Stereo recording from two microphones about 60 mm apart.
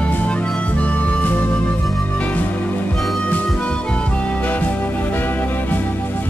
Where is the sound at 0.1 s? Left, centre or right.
Left.